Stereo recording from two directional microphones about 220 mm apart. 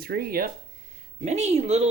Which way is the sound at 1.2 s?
30° right (ahead or behind).